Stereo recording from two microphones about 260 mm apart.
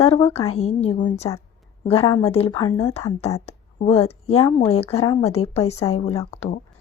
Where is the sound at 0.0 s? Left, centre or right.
Left.